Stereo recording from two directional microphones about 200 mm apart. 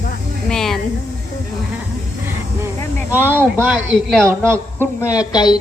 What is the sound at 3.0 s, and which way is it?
Speech, 10° right (ahead or behind).